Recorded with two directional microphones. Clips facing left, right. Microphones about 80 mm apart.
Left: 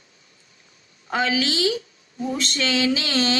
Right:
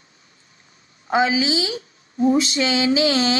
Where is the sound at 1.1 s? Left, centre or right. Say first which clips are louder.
Right 4 dB; centre.